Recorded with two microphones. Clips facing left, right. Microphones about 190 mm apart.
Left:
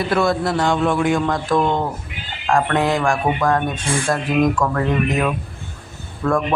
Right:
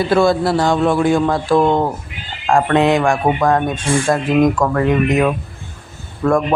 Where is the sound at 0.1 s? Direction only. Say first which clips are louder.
Right 5 dB; 30° right (ahead or behind).